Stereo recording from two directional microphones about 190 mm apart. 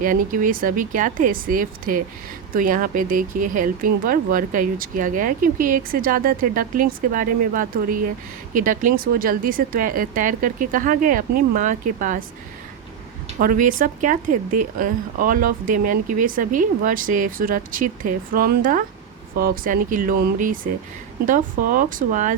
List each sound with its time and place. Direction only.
0.0 s speech: 45° right (ahead or behind)
13.4 s speech: 45° right (ahead or behind)